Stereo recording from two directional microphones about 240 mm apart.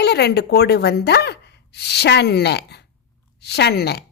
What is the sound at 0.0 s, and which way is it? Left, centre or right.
A woman's voice, left.